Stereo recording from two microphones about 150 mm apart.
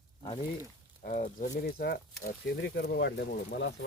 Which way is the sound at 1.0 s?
60° left (ahead or behind).